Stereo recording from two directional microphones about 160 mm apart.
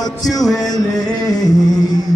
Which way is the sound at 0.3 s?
25° left (ahead or behind).